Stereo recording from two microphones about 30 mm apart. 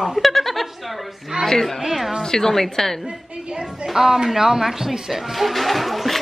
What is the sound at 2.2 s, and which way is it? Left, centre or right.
Speech, centre.